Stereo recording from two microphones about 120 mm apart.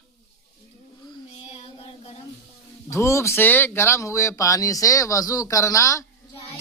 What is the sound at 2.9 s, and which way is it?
Speech, 25° left (ahead or behind).